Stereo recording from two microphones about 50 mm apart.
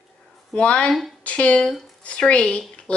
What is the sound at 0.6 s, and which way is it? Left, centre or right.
Speech, left.